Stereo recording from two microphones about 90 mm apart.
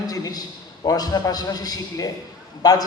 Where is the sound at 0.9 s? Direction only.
45° left (ahead or behind).